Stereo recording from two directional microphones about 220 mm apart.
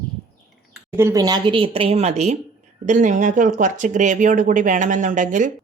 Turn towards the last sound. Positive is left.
turn(degrees=-35)  # may be behind; listen again after turning